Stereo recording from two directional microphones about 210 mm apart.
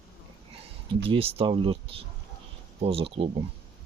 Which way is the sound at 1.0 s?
25° right (ahead or behind).